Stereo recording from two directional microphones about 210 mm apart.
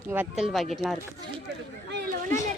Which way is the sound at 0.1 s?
10° right (ahead or behind).